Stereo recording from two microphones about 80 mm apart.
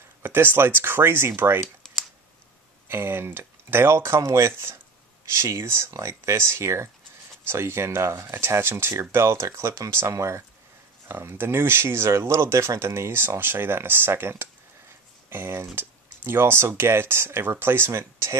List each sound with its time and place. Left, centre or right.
0.2 s speech: right
2.9 s speech: right